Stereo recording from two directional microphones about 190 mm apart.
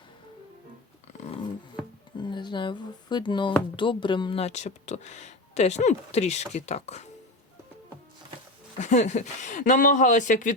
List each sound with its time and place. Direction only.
2.1 s speech: 25° left (ahead or behind)
8.8 s speech: 40° left (ahead or behind)